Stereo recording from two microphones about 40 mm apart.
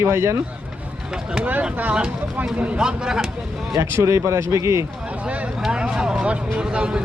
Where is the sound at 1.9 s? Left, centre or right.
Right.